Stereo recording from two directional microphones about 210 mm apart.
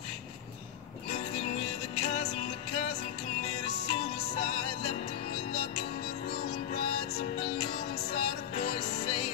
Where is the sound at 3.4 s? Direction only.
30° left (ahead or behind).